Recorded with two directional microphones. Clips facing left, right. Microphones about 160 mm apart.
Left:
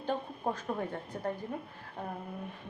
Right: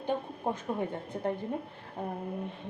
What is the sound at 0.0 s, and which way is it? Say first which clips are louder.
A woman's voice: right 2 dB; 15° right (ahead or behind).